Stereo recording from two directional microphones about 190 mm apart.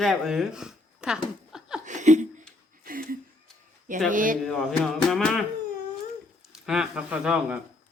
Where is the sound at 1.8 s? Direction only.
40° right (ahead or behind).